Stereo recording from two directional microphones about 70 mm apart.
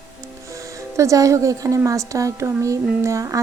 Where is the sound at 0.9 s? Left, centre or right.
Right.